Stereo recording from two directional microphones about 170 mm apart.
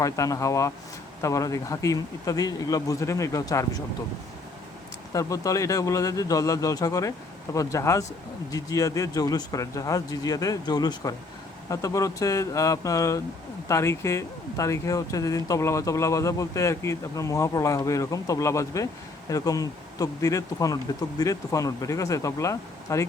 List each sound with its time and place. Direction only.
0.0 s speech: 20° left (ahead or behind)
5.1 s speech: 20° left (ahead or behind)